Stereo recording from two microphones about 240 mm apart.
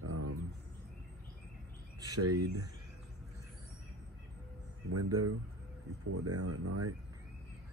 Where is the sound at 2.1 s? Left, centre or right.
Right.